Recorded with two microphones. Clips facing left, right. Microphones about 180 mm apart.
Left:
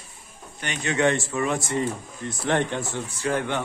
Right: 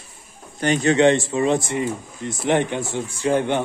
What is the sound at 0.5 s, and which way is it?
Speech, 35° right (ahead or behind).